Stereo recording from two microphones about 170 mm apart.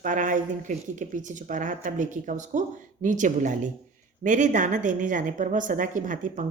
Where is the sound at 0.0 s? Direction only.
50° right (ahead or behind).